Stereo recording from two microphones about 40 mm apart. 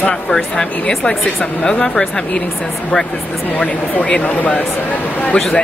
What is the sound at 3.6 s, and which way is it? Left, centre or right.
A woman's voice, left.